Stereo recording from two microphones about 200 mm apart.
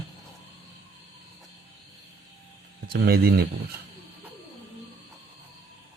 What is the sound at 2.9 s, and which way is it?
Speech, 50° right (ahead or behind).